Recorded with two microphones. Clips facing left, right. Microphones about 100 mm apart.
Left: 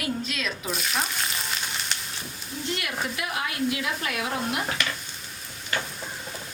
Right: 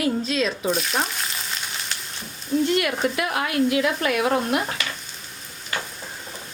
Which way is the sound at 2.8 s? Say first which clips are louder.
Right 8 dB; 55° right (ahead or behind).